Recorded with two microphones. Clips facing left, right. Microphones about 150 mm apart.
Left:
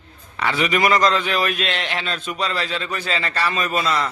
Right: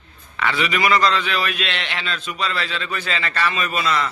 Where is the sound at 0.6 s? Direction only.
45° left (ahead or behind).